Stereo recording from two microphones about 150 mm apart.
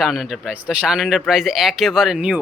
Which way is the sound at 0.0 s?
Centre (ahead or behind).